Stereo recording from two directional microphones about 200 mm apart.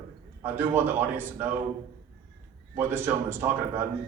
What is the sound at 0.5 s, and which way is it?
Speech, 10° right (ahead or behind).